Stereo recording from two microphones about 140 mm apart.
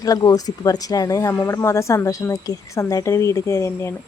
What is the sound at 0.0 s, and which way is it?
A woman's voice, 25° left (ahead or behind).